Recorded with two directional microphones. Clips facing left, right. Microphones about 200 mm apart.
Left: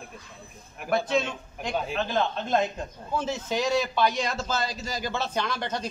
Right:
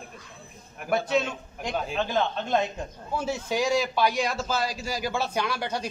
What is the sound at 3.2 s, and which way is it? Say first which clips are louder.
A man's voice: right 1 dB; 10° right (ahead or behind).